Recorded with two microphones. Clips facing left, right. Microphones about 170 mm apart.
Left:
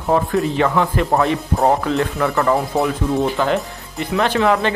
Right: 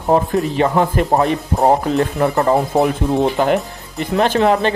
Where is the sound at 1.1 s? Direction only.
20° right (ahead or behind).